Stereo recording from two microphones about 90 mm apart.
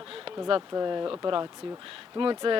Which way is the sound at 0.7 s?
40° right (ahead or behind).